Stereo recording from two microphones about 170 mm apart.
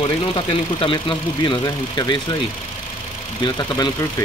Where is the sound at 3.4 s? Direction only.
25° left (ahead or behind).